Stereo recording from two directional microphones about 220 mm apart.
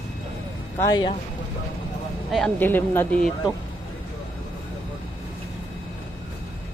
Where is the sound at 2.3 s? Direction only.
Centre (ahead or behind).